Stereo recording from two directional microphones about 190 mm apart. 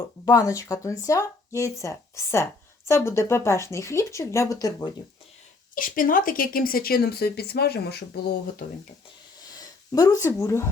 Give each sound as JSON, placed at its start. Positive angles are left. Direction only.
{"t": 0.3, "sound": "speech", "side_deg": 15}
{"t": 5.7, "sound": "speech", "side_deg": 45}
{"t": 9.6, "sound": "speech", "side_deg": 20}